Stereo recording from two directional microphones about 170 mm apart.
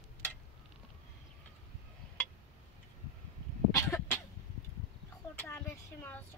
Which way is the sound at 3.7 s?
15° left (ahead or behind).